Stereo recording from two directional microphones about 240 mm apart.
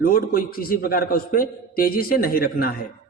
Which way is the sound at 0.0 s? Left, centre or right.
Left.